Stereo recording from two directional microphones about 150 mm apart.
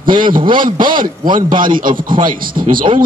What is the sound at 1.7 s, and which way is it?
Speech, 65° right (ahead or behind).